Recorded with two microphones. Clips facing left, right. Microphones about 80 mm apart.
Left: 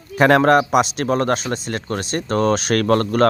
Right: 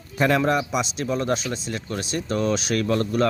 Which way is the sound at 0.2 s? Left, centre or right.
Left.